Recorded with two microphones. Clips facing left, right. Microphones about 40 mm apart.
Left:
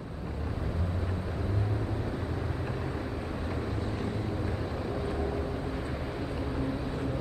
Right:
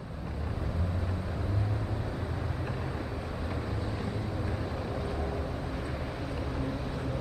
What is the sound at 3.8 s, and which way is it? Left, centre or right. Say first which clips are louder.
Vehicle: left 2 dB; left.